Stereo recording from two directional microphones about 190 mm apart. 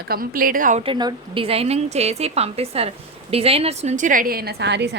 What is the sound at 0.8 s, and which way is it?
Speech, 25° right (ahead or behind).